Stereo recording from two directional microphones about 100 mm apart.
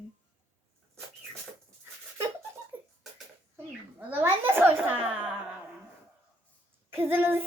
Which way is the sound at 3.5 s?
20° right (ahead or behind).